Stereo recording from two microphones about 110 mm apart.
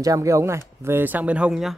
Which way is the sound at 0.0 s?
30° right (ahead or behind).